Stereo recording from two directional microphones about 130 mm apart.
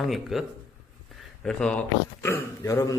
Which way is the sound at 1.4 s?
5° left (ahead or behind).